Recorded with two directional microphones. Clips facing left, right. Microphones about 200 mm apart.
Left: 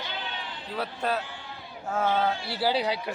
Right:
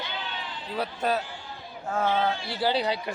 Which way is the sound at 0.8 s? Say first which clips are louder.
Right 2 dB; centre (ahead or behind).